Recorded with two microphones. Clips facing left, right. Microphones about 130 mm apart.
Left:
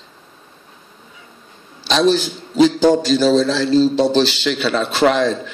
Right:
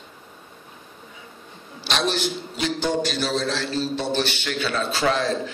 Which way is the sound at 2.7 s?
90° left.